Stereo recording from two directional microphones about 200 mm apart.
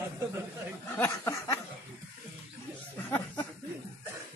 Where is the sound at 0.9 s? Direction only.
15° left (ahead or behind).